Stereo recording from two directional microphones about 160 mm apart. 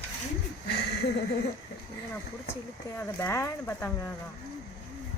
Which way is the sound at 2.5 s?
15° left (ahead or behind).